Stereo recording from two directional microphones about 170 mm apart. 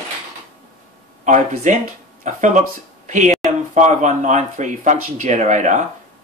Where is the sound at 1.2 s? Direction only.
45° right (ahead or behind).